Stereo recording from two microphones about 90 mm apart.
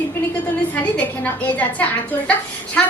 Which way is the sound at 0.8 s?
15° left (ahead or behind).